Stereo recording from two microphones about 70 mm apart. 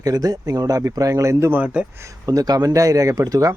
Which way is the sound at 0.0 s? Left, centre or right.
Right.